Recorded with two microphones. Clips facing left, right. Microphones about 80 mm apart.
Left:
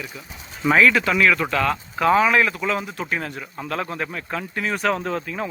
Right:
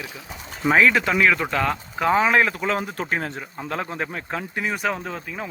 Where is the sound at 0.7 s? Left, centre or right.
Right.